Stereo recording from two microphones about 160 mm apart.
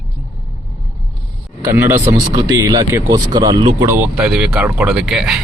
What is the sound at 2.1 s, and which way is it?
Speech, 25° right (ahead or behind).